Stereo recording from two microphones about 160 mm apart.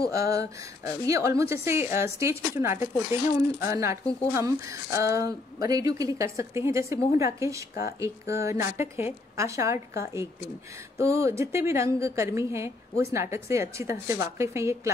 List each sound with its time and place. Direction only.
0.1 s a woman's voice: 20° right (ahead or behind)